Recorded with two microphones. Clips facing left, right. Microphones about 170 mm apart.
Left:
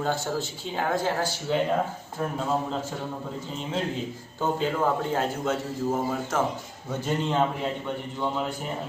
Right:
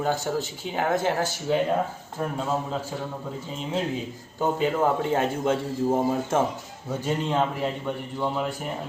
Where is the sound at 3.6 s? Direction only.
Centre (ahead or behind).